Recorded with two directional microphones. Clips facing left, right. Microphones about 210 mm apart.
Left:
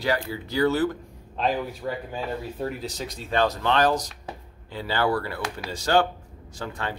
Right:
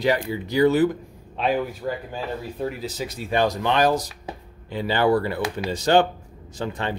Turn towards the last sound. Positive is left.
turn(degrees=-20)  # may be behind; listen again after turning